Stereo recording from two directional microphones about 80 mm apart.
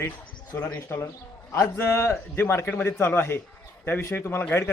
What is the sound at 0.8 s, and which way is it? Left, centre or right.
A man's voice, left.